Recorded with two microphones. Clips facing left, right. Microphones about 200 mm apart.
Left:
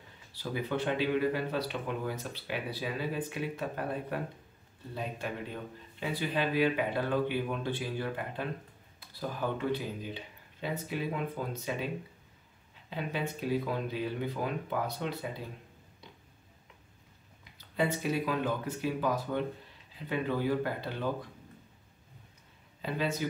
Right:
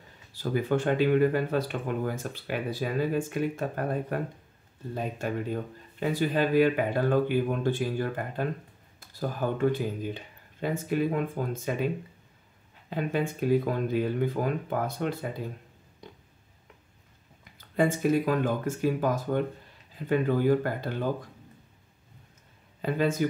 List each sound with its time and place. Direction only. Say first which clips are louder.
0.3 s speech: right 7 dB; 45° right (ahead or behind)
12.9 s speech: right 6 dB; 50° right (ahead or behind)
17.6 s speech: right 6 dB; 50° right (ahead or behind)
22.8 s speech: right 6 dB; 50° right (ahead or behind)